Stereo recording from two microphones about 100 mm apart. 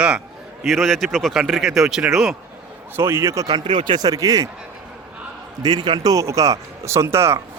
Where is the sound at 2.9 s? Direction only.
25° right (ahead or behind).